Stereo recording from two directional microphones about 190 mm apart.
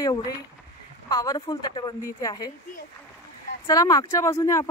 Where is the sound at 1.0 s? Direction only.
20° left (ahead or behind).